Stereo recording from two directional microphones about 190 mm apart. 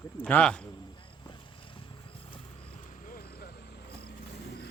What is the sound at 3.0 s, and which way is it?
Vehicle, 50° left (ahead or behind).